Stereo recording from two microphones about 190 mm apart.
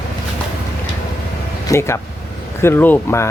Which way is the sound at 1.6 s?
15° left (ahead or behind).